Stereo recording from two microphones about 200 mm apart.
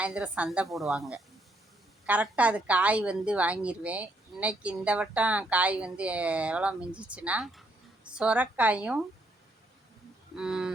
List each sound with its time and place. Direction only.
0.0 s a woman's voice: 5° right (ahead or behind)
10.3 s a woman's voice: 5° right (ahead or behind)